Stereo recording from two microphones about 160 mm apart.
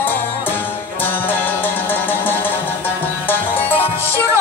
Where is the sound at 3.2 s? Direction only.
10° left (ahead or behind).